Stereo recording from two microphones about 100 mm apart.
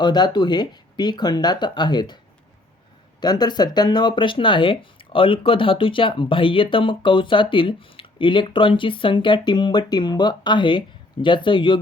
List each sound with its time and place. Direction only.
0.0 s speech: 45° left (ahead or behind)
3.2 s speech: 45° left (ahead or behind)